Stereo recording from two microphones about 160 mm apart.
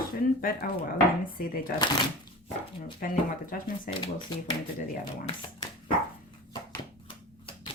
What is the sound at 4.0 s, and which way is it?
Speech, 30° left (ahead or behind).